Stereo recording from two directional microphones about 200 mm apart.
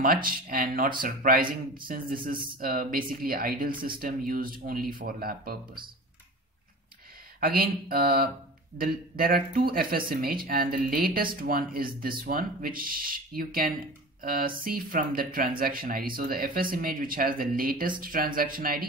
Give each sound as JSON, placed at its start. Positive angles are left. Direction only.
{"t": 0.0, "sound": "speech", "side_deg": -45}
{"t": 7.3, "sound": "speech", "side_deg": -45}